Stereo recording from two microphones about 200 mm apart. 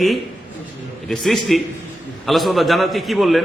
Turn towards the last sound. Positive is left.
turn(degrees=0)  # may be behind; listen again after turning